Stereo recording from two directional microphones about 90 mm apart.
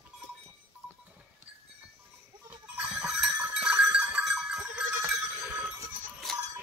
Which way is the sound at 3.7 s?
20° right (ahead or behind).